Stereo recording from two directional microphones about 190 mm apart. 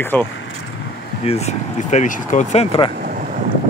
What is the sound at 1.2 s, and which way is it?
Speech, 35° left (ahead or behind).